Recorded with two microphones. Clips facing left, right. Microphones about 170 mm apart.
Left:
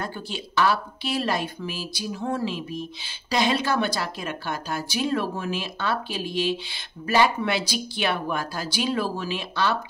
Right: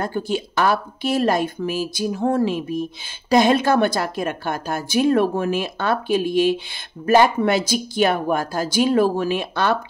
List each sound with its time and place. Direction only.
0.0 s speech: 50° right (ahead or behind)